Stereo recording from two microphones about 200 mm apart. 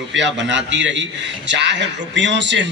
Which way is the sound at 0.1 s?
65° right (ahead or behind).